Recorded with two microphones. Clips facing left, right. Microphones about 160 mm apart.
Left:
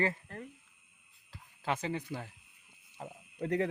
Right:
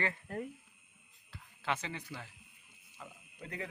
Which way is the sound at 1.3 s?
40° left (ahead or behind).